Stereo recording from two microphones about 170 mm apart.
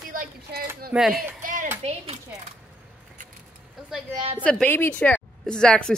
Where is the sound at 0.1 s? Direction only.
55° right (ahead or behind).